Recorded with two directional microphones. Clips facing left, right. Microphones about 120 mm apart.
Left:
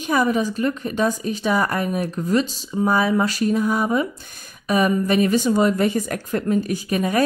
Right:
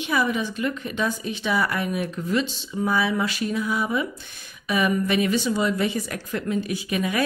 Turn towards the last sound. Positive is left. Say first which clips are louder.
# left 4 dB
turn(degrees=40)  # may be behind; listen again after turning